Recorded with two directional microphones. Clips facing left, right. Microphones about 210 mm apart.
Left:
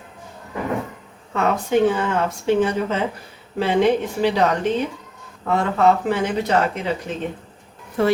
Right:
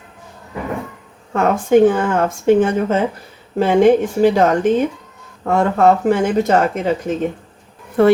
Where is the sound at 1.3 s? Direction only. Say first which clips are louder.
Right 6 dB; 50° right (ahead or behind).